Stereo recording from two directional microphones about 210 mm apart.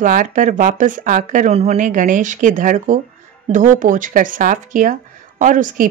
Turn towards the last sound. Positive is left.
turn(degrees=-40)  # may be behind; listen again after turning